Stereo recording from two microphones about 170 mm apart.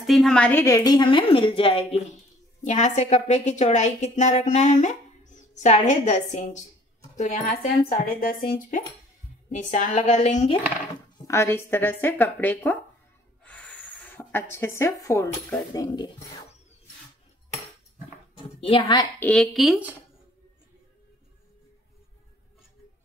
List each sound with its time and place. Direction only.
0.0 s a woman's voice: centre (ahead or behind); by 10.6 s 40° left (ahead or behind)
11.2 s speech: 15° left (ahead or behind)
18.8 s a woman's voice: 20° left (ahead or behind)
19.2 s speech: 5° left (ahead or behind)